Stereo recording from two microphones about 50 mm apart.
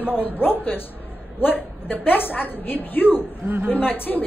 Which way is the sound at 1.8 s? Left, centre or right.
Left.